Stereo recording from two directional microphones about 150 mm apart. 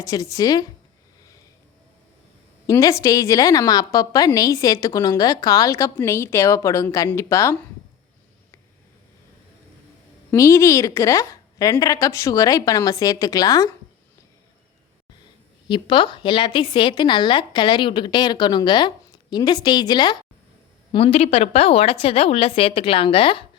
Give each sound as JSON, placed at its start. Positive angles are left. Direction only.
{"t": 0.0, "sound": "a woman's voice", "side_deg": 20}
{"t": 2.6, "sound": "a woman's voice", "side_deg": 20}
{"t": 10.3, "sound": "a woman's voice", "side_deg": 20}
{"t": 15.6, "sound": "a woman's voice", "side_deg": 30}
{"t": 20.9, "sound": "a woman's voice", "side_deg": 40}